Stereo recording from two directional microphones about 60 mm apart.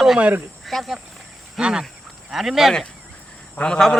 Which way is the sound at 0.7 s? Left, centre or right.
Centre.